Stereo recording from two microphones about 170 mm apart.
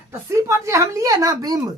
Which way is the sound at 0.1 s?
15° right (ahead or behind).